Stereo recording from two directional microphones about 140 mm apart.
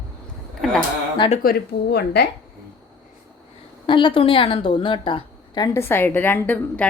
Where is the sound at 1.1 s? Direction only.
45° left (ahead or behind).